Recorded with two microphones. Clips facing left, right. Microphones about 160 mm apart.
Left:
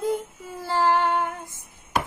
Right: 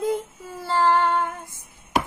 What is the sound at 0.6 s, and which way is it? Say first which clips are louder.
Female singing: right 2 dB; 15° left (ahead or behind).